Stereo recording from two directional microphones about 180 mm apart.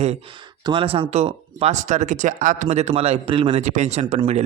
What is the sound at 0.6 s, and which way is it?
Speech, 30° right (ahead or behind).